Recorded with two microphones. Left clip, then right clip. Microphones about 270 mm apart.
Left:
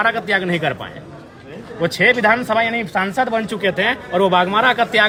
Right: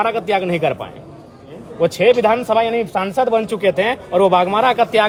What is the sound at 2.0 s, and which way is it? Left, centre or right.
Speech, centre.